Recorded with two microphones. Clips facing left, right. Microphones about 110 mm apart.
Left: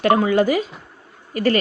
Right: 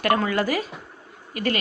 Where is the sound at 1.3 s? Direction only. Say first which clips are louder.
Left 7 dB; 40° left (ahead or behind).